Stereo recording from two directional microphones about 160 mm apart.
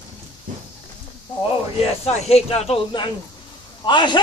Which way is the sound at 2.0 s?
40° left (ahead or behind).